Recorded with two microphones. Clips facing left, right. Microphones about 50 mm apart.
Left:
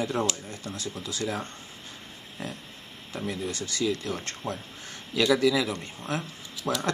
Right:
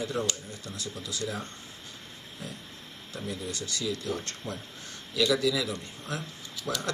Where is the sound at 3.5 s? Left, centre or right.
Left.